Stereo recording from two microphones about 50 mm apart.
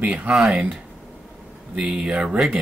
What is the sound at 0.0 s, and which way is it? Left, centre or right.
Speech, right.